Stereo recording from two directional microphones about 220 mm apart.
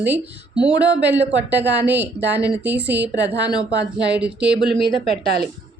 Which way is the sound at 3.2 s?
50° right (ahead or behind).